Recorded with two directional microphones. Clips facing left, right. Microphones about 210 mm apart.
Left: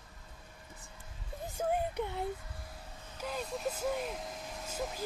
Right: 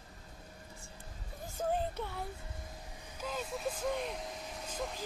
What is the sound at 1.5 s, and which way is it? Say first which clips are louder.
Child singing: left 2 dB; 15° left (ahead or behind).